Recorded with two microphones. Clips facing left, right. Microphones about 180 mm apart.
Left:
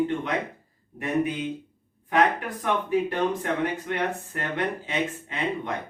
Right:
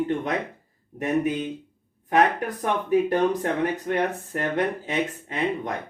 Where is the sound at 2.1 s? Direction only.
45° right (ahead or behind).